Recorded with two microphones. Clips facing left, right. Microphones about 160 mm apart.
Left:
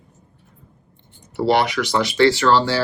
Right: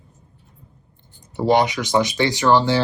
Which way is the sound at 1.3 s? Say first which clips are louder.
Even; 20° right (ahead or behind).